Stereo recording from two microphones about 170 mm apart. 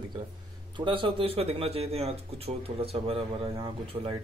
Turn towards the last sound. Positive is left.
turn(degrees=-30)  # may be behind; listen again after turning